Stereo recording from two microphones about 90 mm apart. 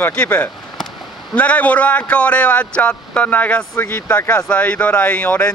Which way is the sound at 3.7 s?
25° left (ahead or behind).